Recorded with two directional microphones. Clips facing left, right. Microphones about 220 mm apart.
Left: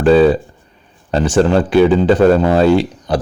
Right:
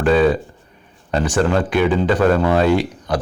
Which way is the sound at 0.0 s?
30° left (ahead or behind).